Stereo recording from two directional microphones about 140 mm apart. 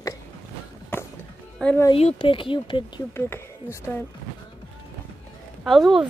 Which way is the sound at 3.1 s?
20° left (ahead or behind).